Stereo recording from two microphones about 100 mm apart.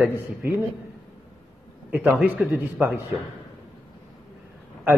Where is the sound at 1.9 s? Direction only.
10° right (ahead or behind).